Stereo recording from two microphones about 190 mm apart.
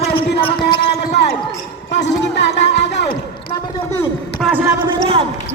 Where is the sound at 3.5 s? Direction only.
25° left (ahead or behind).